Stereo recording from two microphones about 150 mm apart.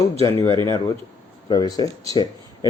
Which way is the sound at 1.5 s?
25° left (ahead or behind).